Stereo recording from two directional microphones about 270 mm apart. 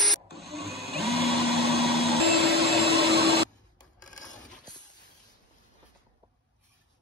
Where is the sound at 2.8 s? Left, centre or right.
Right.